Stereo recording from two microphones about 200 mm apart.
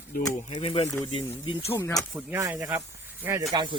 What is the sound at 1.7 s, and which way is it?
Speech, 15° left (ahead or behind).